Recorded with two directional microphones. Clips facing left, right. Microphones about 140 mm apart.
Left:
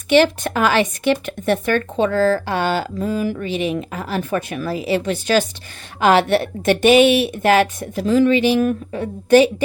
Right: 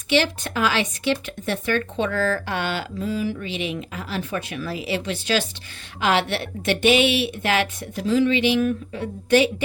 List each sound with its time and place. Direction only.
0.1 s a woman's voice: 50° left (ahead or behind)
2.0 s a woman's voice: 35° left (ahead or behind)